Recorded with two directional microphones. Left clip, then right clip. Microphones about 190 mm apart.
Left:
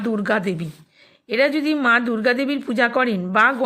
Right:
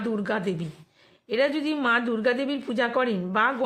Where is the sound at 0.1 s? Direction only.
25° left (ahead or behind).